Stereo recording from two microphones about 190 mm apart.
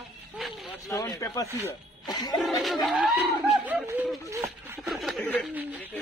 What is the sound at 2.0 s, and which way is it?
Music, 20° left (ahead or behind).